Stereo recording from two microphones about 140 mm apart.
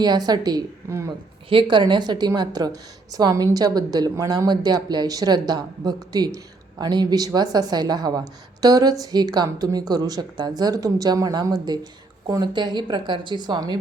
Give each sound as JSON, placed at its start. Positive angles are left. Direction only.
{"t": 0.0, "sound": "a woman's voice", "side_deg": -30}
{"t": 1.5, "sound": "a woman's voice", "side_deg": -35}